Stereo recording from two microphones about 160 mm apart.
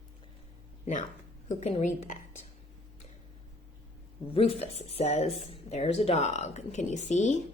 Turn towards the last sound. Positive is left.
turn(degrees=50)  # may be behind; listen again after turning